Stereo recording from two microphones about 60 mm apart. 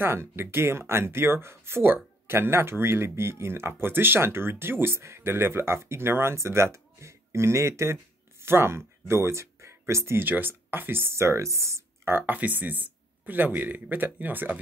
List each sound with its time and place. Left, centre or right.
0.0 s speech: right
10.1 s speech: right